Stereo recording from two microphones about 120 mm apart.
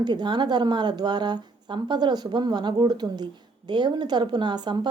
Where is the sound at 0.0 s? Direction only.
40° right (ahead or behind).